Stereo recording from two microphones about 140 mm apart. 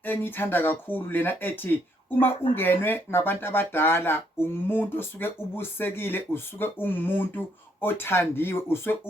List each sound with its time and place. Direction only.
0.0 s speech: 15° left (ahead or behind)